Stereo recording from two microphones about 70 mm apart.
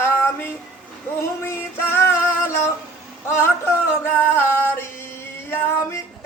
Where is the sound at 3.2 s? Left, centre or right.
Left.